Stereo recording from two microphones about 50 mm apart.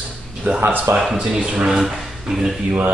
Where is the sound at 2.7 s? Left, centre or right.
Right.